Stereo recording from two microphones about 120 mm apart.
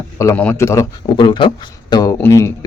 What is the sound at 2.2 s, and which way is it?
Speech, 20° left (ahead or behind).